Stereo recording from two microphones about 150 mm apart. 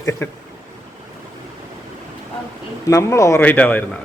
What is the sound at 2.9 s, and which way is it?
Speech, 20° left (ahead or behind).